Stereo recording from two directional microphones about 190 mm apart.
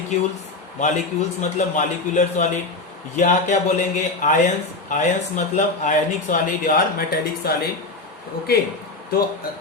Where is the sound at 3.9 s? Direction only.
40° left (ahead or behind).